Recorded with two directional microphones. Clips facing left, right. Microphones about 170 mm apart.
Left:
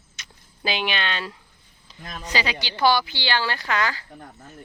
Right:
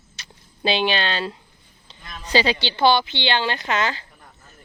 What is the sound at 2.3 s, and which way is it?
Speech, 30° right (ahead or behind).